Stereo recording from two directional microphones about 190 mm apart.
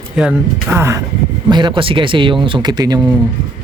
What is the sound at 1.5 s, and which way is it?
Speech, 25° right (ahead or behind).